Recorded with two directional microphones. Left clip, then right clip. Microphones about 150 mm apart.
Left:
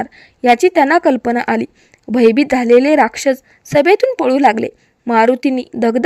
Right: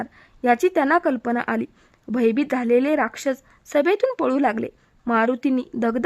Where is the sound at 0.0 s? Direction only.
20° left (ahead or behind).